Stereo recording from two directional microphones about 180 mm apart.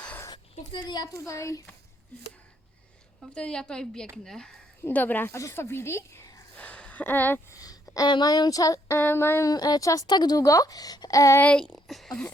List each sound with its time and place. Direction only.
0.0 s a sound: 10° left (ahead or behind)
0.5 s a child's voice: 25° left (ahead or behind)
3.2 s a woman's voice: 5° left (ahead or behind)
6.6 s speech: 5° left (ahead or behind)